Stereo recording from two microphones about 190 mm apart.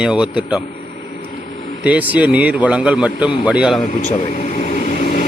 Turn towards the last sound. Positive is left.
turn(degrees=45)  # may be behind; listen again after turning